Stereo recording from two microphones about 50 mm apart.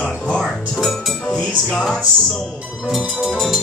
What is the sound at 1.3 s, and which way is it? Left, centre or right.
Music, centre.